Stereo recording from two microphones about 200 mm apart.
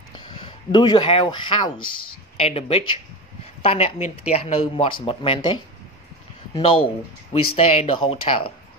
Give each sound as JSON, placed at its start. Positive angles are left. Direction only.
{"t": 0.1, "sound": "speech", "side_deg": 25}
{"t": 1.8, "sound": "speech", "side_deg": 90}
{"t": 2.3, "sound": "speech", "side_deg": 30}